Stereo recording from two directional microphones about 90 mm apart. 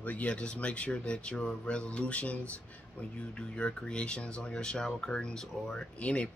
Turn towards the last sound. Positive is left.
turn(degrees=15)  # may be behind; listen again after turning